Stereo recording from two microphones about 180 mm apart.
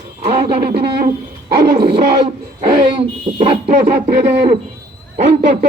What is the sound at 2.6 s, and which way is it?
Speech, 25° right (ahead or behind).